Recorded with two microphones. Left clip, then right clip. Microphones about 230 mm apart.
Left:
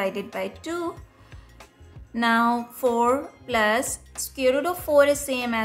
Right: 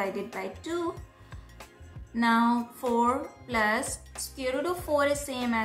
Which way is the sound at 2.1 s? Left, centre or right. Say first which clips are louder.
Left 4 dB; left.